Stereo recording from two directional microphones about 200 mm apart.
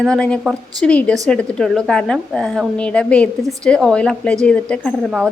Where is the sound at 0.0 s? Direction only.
5° left (ahead or behind).